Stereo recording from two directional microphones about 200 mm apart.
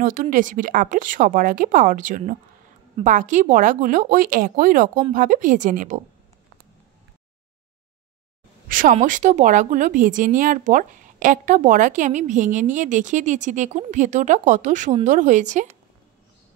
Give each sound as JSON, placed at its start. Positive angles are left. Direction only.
{"t": 0.0, "sound": "a woman's voice", "side_deg": -40}
{"t": 8.6, "sound": "a woman's voice", "side_deg": -40}